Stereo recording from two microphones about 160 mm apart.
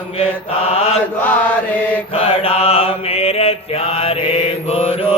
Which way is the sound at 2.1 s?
35° left (ahead or behind).